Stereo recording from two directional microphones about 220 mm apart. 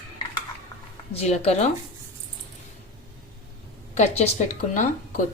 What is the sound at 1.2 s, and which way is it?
Speech, 30° left (ahead or behind).